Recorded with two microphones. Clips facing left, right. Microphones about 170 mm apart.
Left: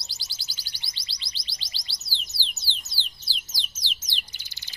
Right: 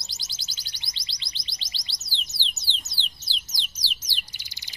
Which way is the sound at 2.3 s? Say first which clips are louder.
Right 1 dB; 20° right (ahead or behind).